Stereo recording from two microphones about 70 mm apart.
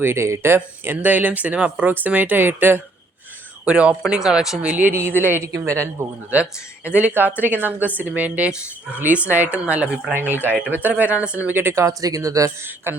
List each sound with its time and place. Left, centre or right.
0.0 s speech: right
3.7 s speech: centre
4.9 s speech: right
5.5 s speech: right
6.3 s speech: right
11.7 s speech: right
12.9 s speech: right